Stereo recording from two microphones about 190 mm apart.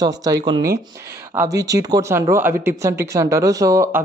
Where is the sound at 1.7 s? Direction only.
20° right (ahead or behind).